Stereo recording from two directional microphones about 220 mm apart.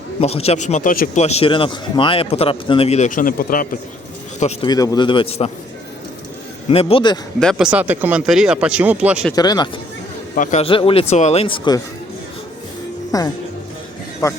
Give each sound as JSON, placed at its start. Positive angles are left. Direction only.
{"t": 0.2, "sound": "speech", "side_deg": 30}
{"t": 4.4, "sound": "speech", "side_deg": 30}
{"t": 4.7, "sound": "speech", "side_deg": 15}
{"t": 6.7, "sound": "speech", "side_deg": 25}
{"t": 7.3, "sound": "speech", "side_deg": 0}
{"t": 9.3, "sound": "speech", "side_deg": 20}
{"t": 10.3, "sound": "speech", "side_deg": 35}
{"t": 13.1, "sound": "music", "side_deg": 15}
{"t": 14.2, "sound": "speech", "side_deg": 15}